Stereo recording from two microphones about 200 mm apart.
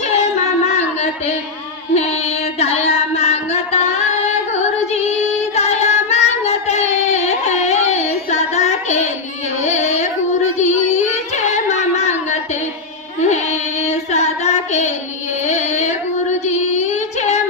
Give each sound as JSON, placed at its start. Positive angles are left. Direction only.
{"t": 2.6, "sound": "music", "side_deg": 30}
{"t": 5.6, "sound": "child singing", "side_deg": 35}
{"t": 9.7, "sound": "carnatic music", "side_deg": 35}
{"t": 10.6, "sound": "a sound", "side_deg": 35}
{"t": 13.8, "sound": "female singing", "side_deg": 35}